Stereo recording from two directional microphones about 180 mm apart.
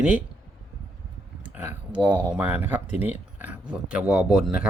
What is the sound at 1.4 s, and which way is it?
Speech, 10° right (ahead or behind).